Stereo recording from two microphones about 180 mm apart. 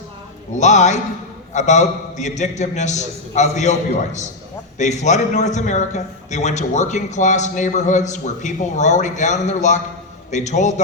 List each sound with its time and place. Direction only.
0.5 s a man's voice: 40° left (ahead or behind)